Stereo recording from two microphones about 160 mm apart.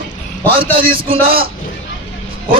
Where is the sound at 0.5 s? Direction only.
35° right (ahead or behind).